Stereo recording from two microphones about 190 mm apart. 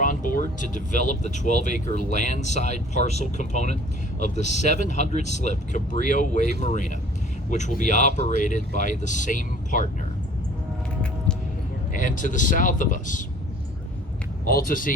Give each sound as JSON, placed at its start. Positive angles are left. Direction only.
{"t": 0.0, "sound": "speech", "side_deg": 45}
{"t": 11.9, "sound": "speech", "side_deg": 45}
{"t": 14.4, "sound": "speech", "side_deg": 50}